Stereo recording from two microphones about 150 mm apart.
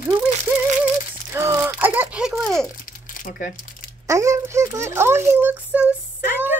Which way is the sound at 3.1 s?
65° left (ahead or behind).